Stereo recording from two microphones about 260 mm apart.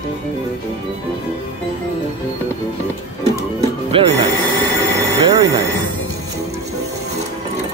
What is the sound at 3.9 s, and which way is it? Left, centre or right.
Speech, right.